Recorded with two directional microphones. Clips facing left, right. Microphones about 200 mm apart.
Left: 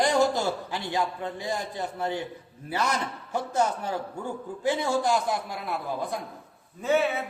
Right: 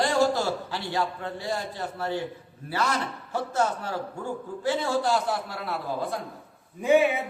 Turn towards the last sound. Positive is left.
turn(degrees=-15)  # may be behind; listen again after turning